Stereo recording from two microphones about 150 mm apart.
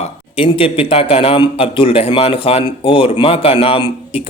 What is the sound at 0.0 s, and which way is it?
A man's voice, 40° left (ahead or behind).